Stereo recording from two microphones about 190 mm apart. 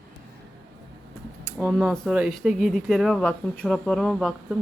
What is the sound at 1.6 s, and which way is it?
Speech, centre (ahead or behind).